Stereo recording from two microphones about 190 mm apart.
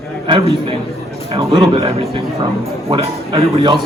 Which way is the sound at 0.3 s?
25° right (ahead or behind).